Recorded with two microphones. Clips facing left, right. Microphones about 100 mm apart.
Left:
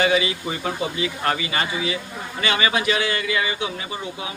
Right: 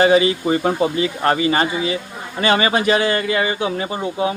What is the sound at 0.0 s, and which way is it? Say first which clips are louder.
A man's voice: right 7 dB; 35° right (ahead or behind).